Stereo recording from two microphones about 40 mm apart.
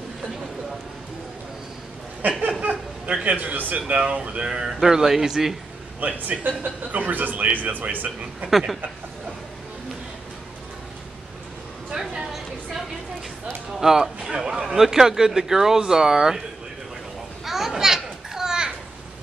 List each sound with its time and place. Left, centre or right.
2.2 s speech: right
2.6 s a sound: right
3.4 s speech: right
3.8 s speech: right; by 5.6 s centre
5.9 s speech: right
8.5 s speech: centre
11.9 s a woman's voice: centre
13.7 s speech: centre
17.5 s children playing: centre